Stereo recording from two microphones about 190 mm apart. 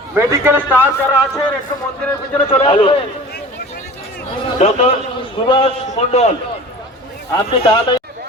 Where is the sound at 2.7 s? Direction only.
25° left (ahead or behind).